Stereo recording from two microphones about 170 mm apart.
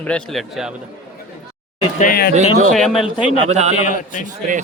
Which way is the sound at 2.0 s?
60° left (ahead or behind).